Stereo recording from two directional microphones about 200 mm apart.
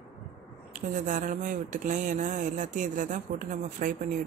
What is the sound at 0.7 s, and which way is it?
Speech, 40° right (ahead or behind).